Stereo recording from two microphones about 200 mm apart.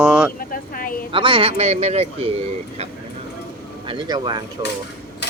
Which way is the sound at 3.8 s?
20° right (ahead or behind).